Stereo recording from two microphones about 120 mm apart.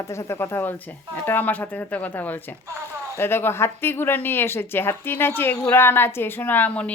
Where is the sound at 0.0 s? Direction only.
25° left (ahead or behind).